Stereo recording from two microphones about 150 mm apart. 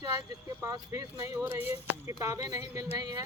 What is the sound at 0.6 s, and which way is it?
Speech, 20° right (ahead or behind).